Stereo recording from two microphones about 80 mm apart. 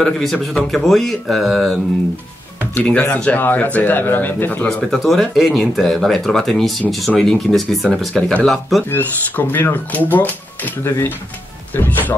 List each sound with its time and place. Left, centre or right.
0.0 s speech: centre
2.8 s speech: centre
4.6 s speech: centre
8.1 s speech: centre
8.5 s speech: centre
8.9 s speech: left